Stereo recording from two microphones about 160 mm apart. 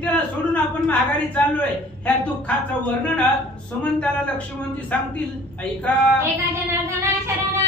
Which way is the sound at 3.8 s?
5° left (ahead or behind).